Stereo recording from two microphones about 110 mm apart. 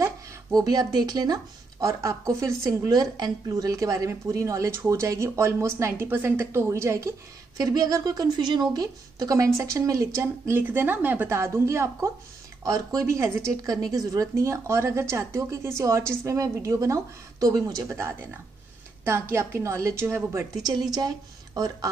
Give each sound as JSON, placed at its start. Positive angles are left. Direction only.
{"t": 0.0, "sound": "speech", "side_deg": -35}
{"t": 20.6, "sound": "a woman's voice", "side_deg": -35}